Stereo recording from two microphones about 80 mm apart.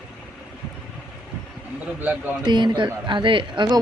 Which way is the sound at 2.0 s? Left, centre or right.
Right.